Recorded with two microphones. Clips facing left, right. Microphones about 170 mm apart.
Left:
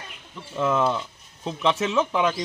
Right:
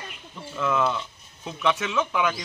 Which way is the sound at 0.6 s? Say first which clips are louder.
Left 2 dB; 30° left (ahead or behind).